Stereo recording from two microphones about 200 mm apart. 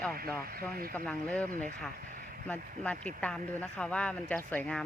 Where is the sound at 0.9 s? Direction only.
5° left (ahead or behind).